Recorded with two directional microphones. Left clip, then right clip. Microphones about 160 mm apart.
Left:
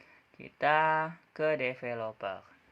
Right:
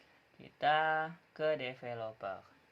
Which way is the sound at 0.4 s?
50° left (ahead or behind).